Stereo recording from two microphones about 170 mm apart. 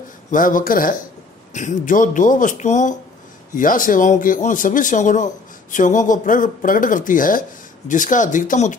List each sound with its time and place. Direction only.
0.3 s a man's voice: 50° left (ahead or behind)